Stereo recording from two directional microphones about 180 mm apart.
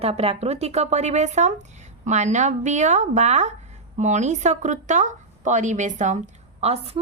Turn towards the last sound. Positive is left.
turn(degrees=-35)  # may be behind; listen again after turning